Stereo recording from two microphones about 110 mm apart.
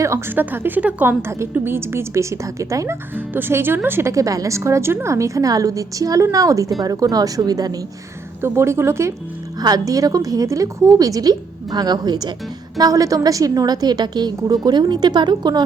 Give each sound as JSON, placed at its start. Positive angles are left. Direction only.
{"t": 0.0, "sound": "a woman's voice", "side_deg": -25}
{"t": 8.4, "sound": "a woman's voice", "side_deg": -25}
{"t": 9.6, "sound": "a woman's voice", "side_deg": -35}